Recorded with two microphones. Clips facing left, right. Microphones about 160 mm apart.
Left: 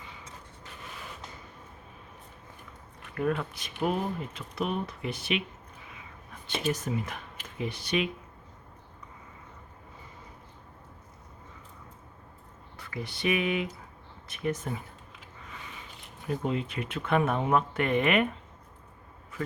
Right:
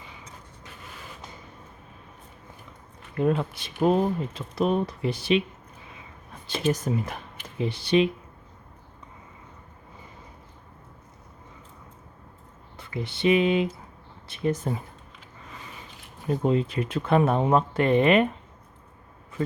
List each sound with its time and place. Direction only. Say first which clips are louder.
3.2 s speech: right 5 dB; 25° right (ahead or behind)
6.5 s speech: right 5 dB; 40° right (ahead or behind)
12.7 s speech: right 5 dB; 25° right (ahead or behind)
16.2 s speech: right 7 dB; 35° right (ahead or behind)